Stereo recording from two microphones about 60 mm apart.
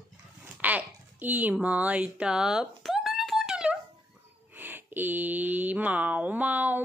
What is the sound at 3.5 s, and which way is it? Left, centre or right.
Wail, centre.